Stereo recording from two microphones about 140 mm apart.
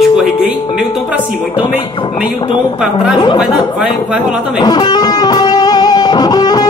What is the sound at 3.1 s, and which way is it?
Speech, 30° left (ahead or behind).